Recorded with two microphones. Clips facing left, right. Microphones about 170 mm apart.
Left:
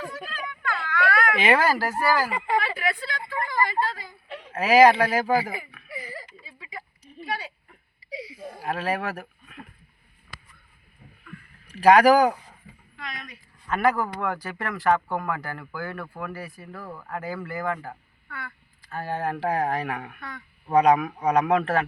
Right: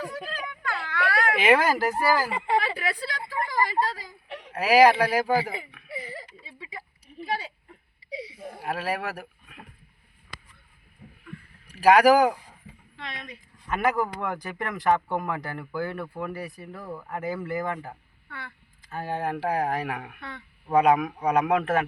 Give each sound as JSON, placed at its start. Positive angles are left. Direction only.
{"t": 0.3, "sound": "a sound", "side_deg": -30}
{"t": 1.5, "sound": "speech", "side_deg": -20}
{"t": 4.4, "sound": "speech", "side_deg": -15}
{"t": 5.9, "sound": "a sound", "side_deg": -25}
{"t": 8.6, "sound": "speech", "side_deg": -5}
{"t": 12.0, "sound": "speech", "side_deg": -10}
{"t": 13.0, "sound": "speech", "side_deg": -30}
{"t": 13.7, "sound": "speech", "side_deg": -20}
{"t": 18.3, "sound": "a sound", "side_deg": -25}
{"t": 19.5, "sound": "speech", "side_deg": -5}
{"t": 21.5, "sound": "speech", "side_deg": -10}